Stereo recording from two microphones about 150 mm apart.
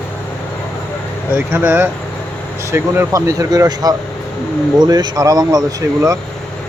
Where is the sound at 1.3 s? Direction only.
15° right (ahead or behind).